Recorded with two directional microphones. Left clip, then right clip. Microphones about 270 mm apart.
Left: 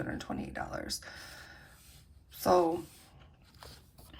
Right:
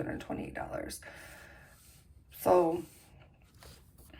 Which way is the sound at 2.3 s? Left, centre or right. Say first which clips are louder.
Right 1 dB; centre.